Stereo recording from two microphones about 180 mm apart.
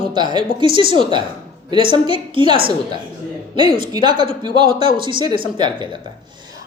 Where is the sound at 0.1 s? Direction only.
25° right (ahead or behind).